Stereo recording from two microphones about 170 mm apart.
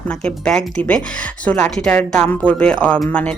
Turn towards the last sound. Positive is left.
turn(degrees=5)  # may be behind; listen again after turning